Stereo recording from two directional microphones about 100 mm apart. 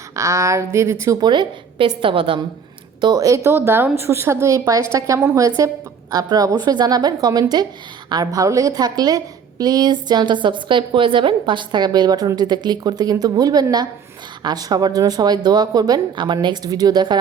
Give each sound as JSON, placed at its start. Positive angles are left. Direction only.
{"t": 0.2, "sound": "speech", "side_deg": -30}
{"t": 1.2, "sound": "a woman's voice", "side_deg": -50}
{"t": 3.0, "sound": "a woman's voice", "side_deg": -40}